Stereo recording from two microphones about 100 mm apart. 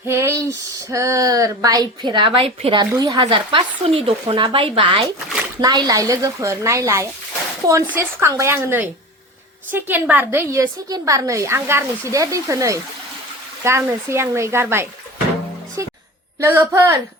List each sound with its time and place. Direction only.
0.1 s a woman's voice: 30° right (ahead or behind); by 2.8 s 70° right (ahead or behind)
2.9 s a woman's voice: 35° right (ahead or behind)
3.2 s speech: 55° right (ahead or behind)
5.5 s a woman's voice: 45° right (ahead or behind); by 14.8 s 25° right (ahead or behind)
16.4 s a woman's voice: 25° right (ahead or behind)